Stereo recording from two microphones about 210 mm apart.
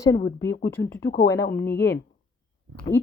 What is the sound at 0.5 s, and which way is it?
Speech, 50° left (ahead or behind).